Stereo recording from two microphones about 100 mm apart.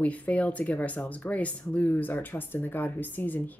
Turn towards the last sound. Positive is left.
turn(degrees=20)  # may be behind; listen again after turning